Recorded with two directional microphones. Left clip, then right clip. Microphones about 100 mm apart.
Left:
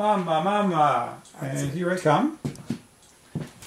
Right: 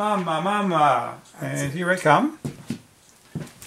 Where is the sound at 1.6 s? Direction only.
40° right (ahead or behind).